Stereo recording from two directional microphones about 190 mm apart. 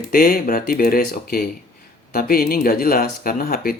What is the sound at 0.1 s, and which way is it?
Speech, 50° left (ahead or behind).